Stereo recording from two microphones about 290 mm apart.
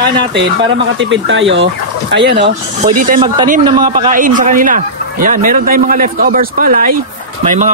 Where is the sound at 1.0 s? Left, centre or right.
Right.